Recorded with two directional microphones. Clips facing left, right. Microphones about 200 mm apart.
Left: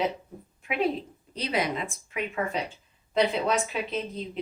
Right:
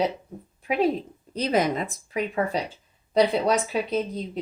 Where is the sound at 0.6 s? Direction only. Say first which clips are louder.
Right 4 dB; 40° right (ahead or behind).